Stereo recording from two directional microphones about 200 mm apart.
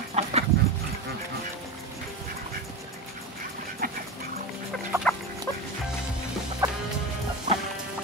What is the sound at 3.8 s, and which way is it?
Duck, 45° right (ahead or behind).